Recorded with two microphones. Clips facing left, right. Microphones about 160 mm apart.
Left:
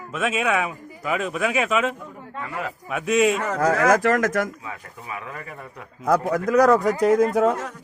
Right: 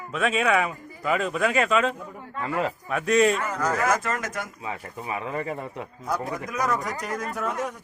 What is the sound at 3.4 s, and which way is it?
Speech, 85° left.